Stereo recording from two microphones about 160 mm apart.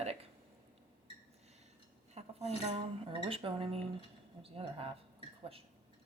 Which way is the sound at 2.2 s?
40° right (ahead or behind).